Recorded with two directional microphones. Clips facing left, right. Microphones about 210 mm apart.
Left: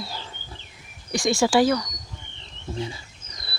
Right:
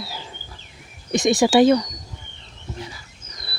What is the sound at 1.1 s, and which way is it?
Speech, 20° right (ahead or behind).